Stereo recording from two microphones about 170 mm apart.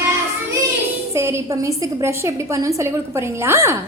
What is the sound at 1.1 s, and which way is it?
A woman's voice, 15° right (ahead or behind).